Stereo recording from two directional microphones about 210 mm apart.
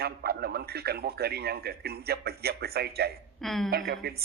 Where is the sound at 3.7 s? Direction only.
45° right (ahead or behind).